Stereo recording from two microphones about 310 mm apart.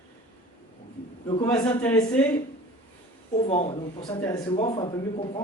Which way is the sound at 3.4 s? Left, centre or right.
Left.